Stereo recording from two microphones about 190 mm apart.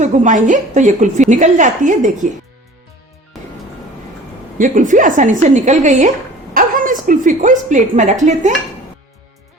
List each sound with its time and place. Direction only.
0.0 s a woman's voice: 40° right (ahead or behind)
4.5 s a woman's voice: 45° right (ahead or behind)